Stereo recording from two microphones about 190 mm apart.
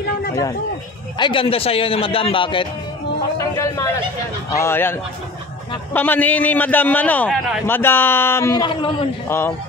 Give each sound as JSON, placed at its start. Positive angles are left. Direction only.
{"t": 1.1, "sound": "a man's voice", "side_deg": 25}
{"t": 3.5, "sound": "a man's voice", "side_deg": 15}
{"t": 5.9, "sound": "a man's voice", "side_deg": 10}
{"t": 7.2, "sound": "speech", "side_deg": -5}
{"t": 7.6, "sound": "a man's voice", "side_deg": 10}